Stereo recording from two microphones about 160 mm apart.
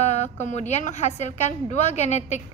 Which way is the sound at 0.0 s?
45° left (ahead or behind).